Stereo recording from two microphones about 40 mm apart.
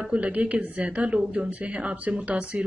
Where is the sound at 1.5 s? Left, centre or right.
Right.